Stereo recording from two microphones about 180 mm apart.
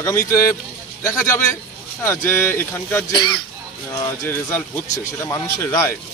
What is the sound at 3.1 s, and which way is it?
Speech, 25° left (ahead or behind).